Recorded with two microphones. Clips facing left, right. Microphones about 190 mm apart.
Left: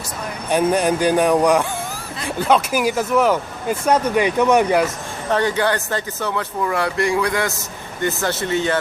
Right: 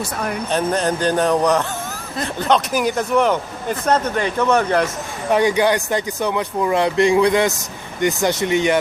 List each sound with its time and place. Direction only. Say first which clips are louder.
0.5 s speech: left 4 dB; 10° left (ahead or behind)
5.3 s speech: right 3 dB; 15° right (ahead or behind)